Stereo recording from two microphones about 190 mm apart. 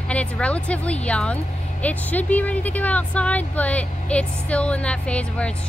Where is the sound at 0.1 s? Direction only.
5° left (ahead or behind).